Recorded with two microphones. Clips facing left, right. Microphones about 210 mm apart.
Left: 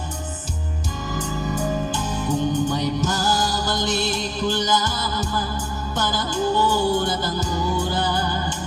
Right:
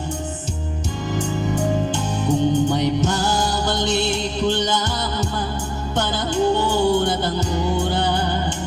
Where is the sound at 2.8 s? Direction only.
60° right (ahead or behind).